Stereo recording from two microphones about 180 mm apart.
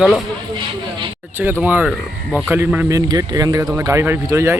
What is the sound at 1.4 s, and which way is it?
A man's voice, 10° right (ahead or behind).